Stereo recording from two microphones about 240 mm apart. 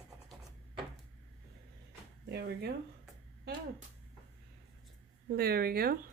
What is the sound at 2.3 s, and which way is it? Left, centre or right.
Speech, right.